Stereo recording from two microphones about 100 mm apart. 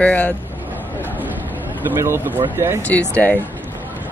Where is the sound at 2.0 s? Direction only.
25° right (ahead or behind).